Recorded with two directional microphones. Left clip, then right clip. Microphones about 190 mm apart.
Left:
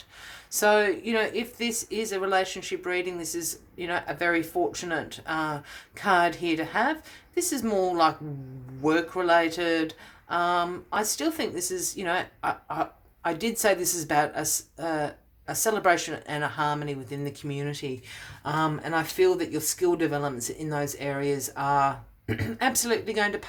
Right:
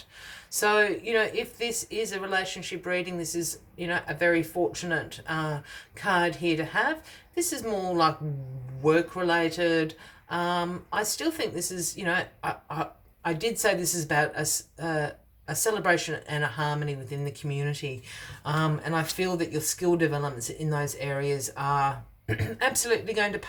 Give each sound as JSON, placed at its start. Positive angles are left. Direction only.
{"t": 0.5, "sound": "speech", "side_deg": 30}